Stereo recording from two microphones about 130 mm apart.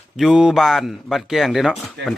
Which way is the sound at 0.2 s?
5° right (ahead or behind).